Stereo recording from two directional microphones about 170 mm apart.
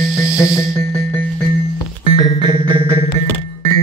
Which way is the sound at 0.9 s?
10° left (ahead or behind).